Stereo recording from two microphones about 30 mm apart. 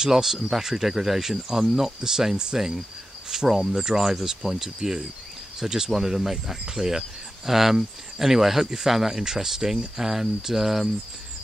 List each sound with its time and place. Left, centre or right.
0.1 s speech: centre
2.0 s speech: right